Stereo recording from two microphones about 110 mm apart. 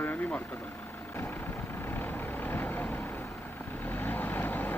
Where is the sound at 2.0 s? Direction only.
20° left (ahead or behind).